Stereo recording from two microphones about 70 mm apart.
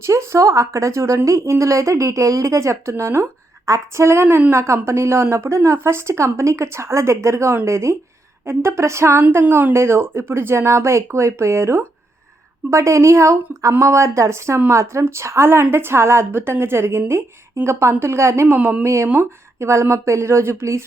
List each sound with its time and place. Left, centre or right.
0.0 s a woman's voice: right
4.5 s a woman's voice: right
18.5 s a woman's voice: right